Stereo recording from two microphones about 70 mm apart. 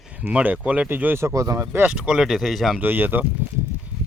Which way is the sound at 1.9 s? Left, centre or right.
Centre.